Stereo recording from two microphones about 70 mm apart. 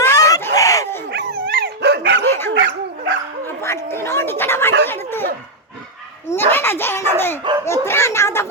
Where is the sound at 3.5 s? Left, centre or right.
Left.